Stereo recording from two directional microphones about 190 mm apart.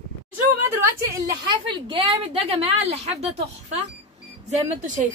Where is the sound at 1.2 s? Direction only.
25° right (ahead or behind).